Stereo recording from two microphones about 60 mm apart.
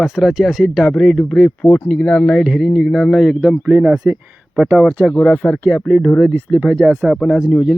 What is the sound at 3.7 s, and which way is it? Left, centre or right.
Speech, right.